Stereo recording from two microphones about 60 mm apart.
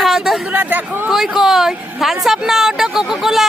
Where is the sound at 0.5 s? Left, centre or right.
Right.